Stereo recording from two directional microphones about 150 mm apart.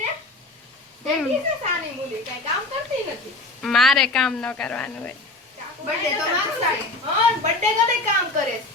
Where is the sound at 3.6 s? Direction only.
Centre (ahead or behind).